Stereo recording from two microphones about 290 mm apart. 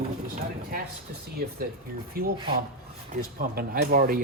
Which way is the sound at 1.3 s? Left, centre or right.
Right.